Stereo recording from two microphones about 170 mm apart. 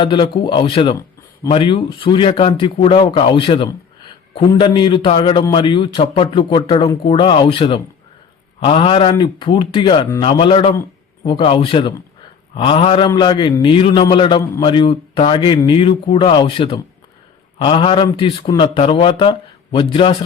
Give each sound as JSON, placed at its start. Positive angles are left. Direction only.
{"t": 0.0, "sound": "a man's voice", "side_deg": 30}